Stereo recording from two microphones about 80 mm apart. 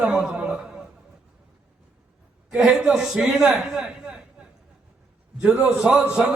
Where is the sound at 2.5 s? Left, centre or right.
Centre.